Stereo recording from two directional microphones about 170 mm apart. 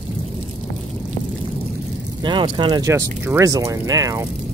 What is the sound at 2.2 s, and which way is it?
Speech, 30° right (ahead or behind).